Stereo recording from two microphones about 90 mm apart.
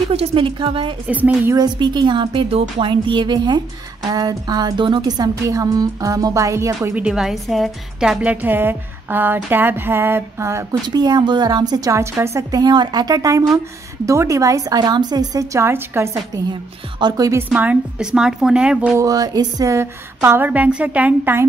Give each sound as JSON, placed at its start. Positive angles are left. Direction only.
{"t": 0.3, "sound": "speech", "side_deg": -85}
{"t": 1.0, "sound": "a woman's voice", "side_deg": -15}
{"t": 1.8, "sound": "a woman's voice", "side_deg": -55}
{"t": 7.0, "sound": "a woman's voice", "side_deg": -10}
{"t": 8.2, "sound": "speech", "side_deg": -15}
{"t": 10.9, "sound": "a woman's voice", "side_deg": -50}
{"t": 12.0, "sound": "a woman's voice", "side_deg": -35}
{"t": 15.6, "sound": "speech", "side_deg": -25}
{"t": 17.0, "sound": "speech", "side_deg": -60}
{"t": 17.5, "sound": "a woman's voice", "side_deg": -15}
{"t": 18.9, "sound": "speech", "side_deg": -45}